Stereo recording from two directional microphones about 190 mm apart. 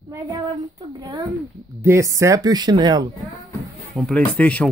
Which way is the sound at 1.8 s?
15° right (ahead or behind).